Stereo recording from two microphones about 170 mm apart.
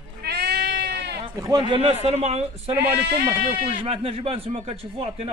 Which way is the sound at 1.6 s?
35° right (ahead or behind).